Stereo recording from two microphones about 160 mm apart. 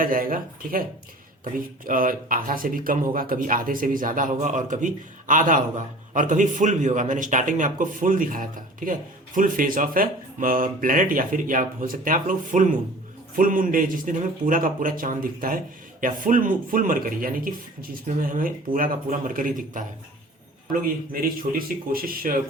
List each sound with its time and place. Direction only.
0.0 s speech: 60° right (ahead or behind)
20.8 s speech: 65° right (ahead or behind)